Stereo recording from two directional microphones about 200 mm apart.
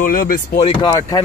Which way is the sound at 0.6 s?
25° left (ahead or behind).